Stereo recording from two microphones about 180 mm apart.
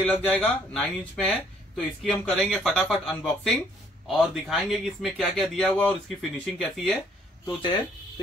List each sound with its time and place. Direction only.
0.0 s speech: 5° left (ahead or behind)
7.4 s speech: 25° left (ahead or behind)